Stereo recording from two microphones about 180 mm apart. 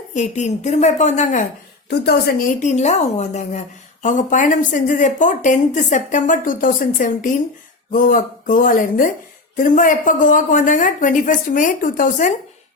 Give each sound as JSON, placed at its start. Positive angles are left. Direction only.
{"t": 0.1, "sound": "a woman's voice", "side_deg": 40}
{"t": 1.9, "sound": "a woman's voice", "side_deg": 65}
{"t": 2.6, "sound": "a woman's voice", "side_deg": 40}